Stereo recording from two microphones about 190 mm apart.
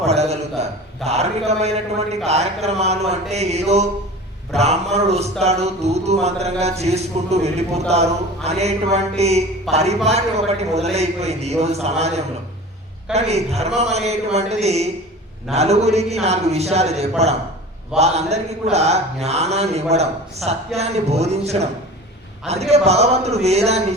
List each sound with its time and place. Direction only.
0.1 s a man's voice: 35° right (ahead or behind)